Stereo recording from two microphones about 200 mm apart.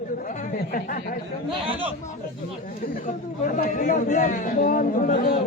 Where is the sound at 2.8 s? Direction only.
40° left (ahead or behind).